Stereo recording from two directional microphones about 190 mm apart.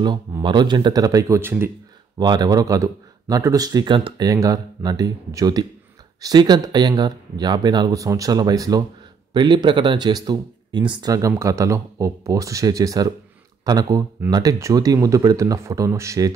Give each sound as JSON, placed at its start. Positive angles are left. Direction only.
{"t": 0.0, "sound": "speech", "side_deg": -25}